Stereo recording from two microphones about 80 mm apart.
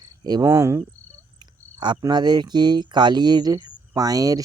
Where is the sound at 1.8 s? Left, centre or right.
Right.